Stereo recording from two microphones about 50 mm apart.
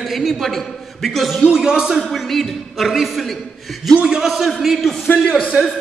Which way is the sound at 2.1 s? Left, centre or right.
Centre.